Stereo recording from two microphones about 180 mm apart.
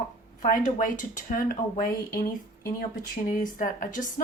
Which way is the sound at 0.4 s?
50° left (ahead or behind).